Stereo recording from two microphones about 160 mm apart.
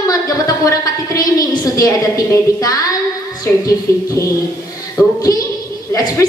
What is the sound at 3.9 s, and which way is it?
Music, 15° left (ahead or behind).